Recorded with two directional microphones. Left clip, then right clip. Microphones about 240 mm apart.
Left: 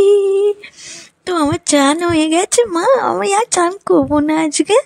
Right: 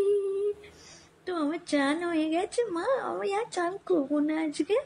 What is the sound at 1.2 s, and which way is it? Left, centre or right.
Speech, left.